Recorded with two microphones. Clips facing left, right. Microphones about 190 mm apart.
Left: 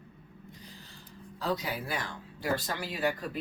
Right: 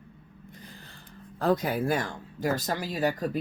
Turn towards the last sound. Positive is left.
turn(degrees=-40)  # may be behind; listen again after turning